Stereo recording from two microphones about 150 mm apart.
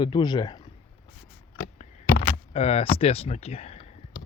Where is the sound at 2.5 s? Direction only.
40° left (ahead or behind).